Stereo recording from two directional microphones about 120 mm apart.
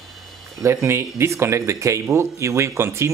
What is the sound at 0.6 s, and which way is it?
Speech, 20° right (ahead or behind).